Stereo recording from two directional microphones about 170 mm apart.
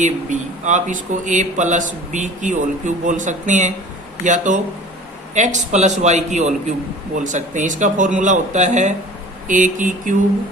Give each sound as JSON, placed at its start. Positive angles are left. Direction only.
{"t": 0.0, "sound": "speech", "side_deg": -45}